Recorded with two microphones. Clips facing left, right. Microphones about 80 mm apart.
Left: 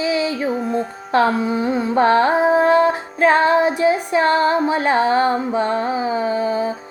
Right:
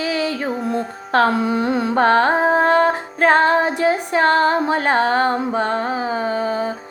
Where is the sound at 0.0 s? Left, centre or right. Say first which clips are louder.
Left 2 dB; right.